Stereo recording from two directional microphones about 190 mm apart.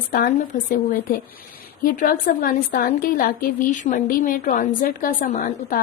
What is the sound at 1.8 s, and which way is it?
A woman's voice, 45° left (ahead or behind).